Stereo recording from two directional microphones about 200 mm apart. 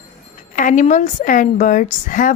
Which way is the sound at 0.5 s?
40° left (ahead or behind).